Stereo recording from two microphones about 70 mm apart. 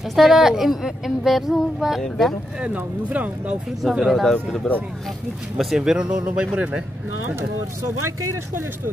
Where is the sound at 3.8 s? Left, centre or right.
Centre.